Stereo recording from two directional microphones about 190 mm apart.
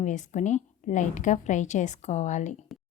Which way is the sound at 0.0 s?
40° left (ahead or behind).